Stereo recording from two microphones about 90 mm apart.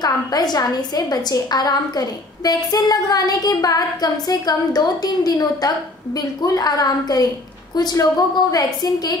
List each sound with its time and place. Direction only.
0.0 s a woman's voice: 50° left (ahead or behind)